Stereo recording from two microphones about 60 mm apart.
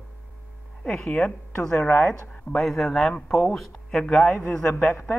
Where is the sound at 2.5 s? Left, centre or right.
Centre.